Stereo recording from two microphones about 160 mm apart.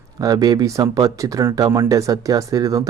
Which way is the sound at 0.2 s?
20° right (ahead or behind).